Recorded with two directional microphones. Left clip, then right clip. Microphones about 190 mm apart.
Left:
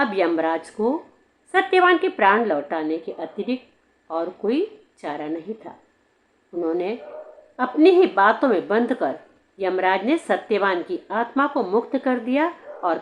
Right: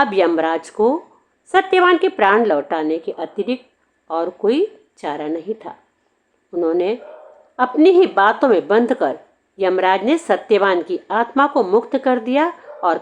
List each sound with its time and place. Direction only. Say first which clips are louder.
0.0 s a woman's voice: right 5 dB; 40° right (ahead or behind)